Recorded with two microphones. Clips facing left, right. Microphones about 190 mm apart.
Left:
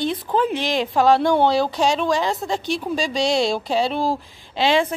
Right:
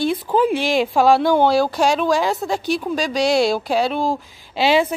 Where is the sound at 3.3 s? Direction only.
5° right (ahead or behind).